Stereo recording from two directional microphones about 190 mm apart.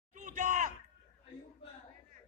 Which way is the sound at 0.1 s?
40° right (ahead or behind).